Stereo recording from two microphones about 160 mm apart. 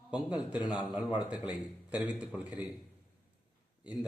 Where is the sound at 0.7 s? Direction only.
10° right (ahead or behind).